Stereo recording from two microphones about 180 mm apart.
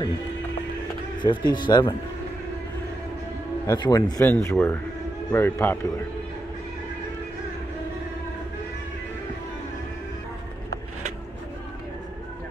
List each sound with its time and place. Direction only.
1.2 s speech: 25° left (ahead or behind)
3.6 s speech: 20° left (ahead or behind)